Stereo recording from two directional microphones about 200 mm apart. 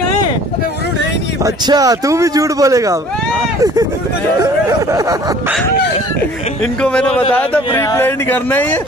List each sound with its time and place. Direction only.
1.4 s speech: 15° right (ahead or behind)
4.4 s speech: 15° right (ahead or behind)
6.8 s a man's voice: 5° left (ahead or behind)